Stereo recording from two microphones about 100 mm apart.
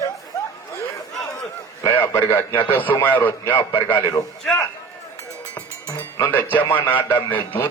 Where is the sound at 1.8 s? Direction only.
25° left (ahead or behind).